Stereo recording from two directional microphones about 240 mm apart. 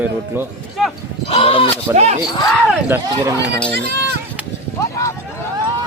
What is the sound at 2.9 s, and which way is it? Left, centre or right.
Speech, centre.